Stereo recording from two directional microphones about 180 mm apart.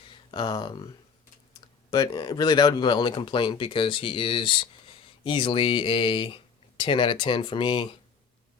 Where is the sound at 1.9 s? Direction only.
20° left (ahead or behind).